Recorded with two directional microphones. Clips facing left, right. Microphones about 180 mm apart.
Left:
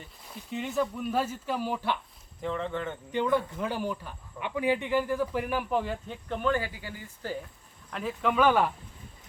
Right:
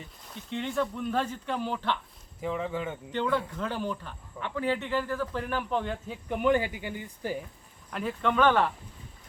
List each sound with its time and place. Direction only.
0.0 s speech: 5° left (ahead or behind)
2.4 s speech: 5° right (ahead or behind)
3.1 s speech: 10° left (ahead or behind)
6.2 s speech: 15° right (ahead or behind)
7.9 s speech: centre (ahead or behind)